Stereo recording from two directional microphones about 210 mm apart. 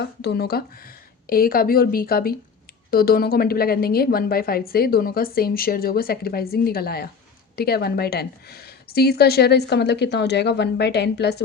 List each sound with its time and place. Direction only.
0.0 s a woman's voice: 50° left (ahead or behind)